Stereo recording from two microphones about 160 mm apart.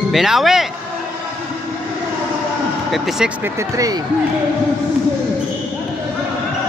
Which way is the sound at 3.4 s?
15° right (ahead or behind).